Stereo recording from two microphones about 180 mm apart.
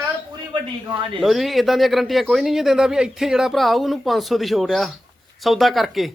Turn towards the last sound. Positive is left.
turn(degrees=0)  # may be behind; listen again after turning